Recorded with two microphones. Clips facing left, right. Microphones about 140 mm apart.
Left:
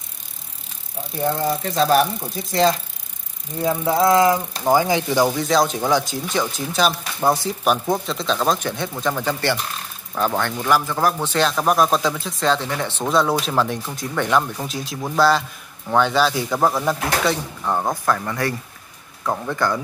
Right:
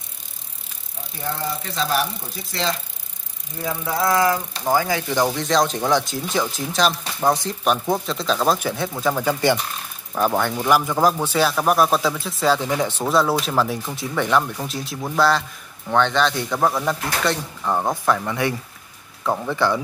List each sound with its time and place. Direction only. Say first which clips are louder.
1.3 s speech: left 3 dB; 40° left (ahead or behind)
3.6 s a sound: left 5 dB; 25° left (ahead or behind)
5.1 s speech: left 1 dB; 5° left (ahead or behind)